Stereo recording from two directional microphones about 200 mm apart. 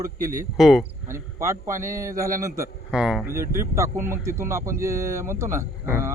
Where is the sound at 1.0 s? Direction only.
15° right (ahead or behind).